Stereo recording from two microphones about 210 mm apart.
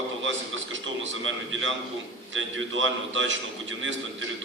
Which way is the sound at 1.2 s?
65° right (ahead or behind).